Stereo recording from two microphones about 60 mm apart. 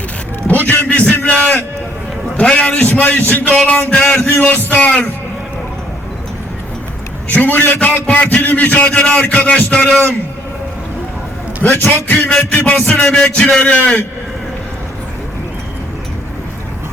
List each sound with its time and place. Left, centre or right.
0.7 s a sound: left
2.4 s speech: centre
2.7 s a man's voice: left
3.5 s speech: centre
4.4 s a man's voice: left
7.3 s a man's voice: left
11.6 s a man's voice: left
12.2 s speech: centre
13.7 s a man's voice: left